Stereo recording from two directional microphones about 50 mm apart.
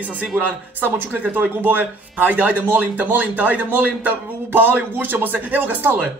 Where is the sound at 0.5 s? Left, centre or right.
Right.